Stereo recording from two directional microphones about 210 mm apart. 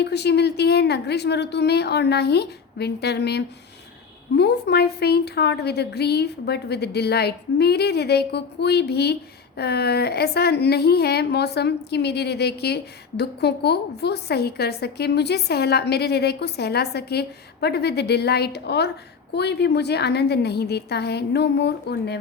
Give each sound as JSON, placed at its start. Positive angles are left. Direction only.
{"t": 0.0, "sound": "speech", "side_deg": 55}